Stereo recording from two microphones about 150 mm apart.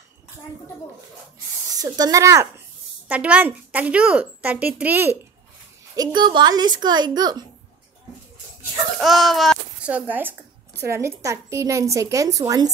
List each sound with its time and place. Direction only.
1.8 s a woman's voice: 25° right (ahead or behind)
3.1 s a woman's voice: 10° right (ahead or behind)
5.9 s a woman's voice: 30° right (ahead or behind)
9.0 s a child's voice: centre (ahead or behind); by 12.7 s 25° right (ahead or behind)